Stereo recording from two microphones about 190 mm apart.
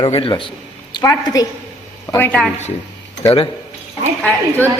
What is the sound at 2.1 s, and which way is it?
Speech, 5° left (ahead or behind).